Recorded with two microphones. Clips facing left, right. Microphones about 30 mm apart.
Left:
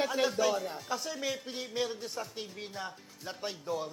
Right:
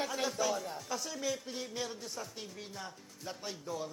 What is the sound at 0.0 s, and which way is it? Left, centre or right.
Speech, centre.